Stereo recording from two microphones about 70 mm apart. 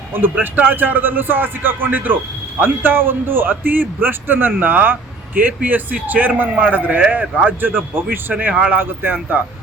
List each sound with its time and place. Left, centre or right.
0.1 s a man's voice: right